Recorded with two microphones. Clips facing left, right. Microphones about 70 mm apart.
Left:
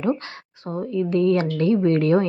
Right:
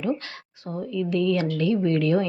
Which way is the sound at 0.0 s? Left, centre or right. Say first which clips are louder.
Left 3 dB; left.